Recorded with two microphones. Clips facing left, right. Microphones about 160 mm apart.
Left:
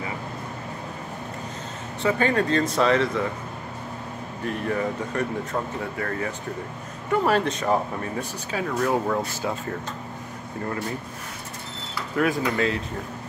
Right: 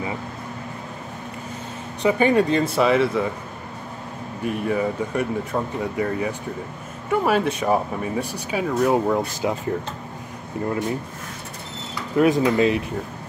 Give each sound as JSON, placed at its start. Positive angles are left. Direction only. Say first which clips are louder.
{"t": 2.0, "sound": "speech", "louder": "right 4 dB", "side_deg": -15}
{"t": 4.5, "sound": "speech", "louder": "right 3 dB", "side_deg": -10}
{"t": 12.2, "sound": "speech", "louder": "right 6 dB", "side_deg": -20}